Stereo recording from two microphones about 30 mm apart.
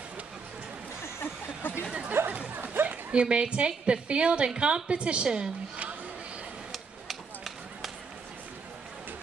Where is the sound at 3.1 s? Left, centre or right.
Right.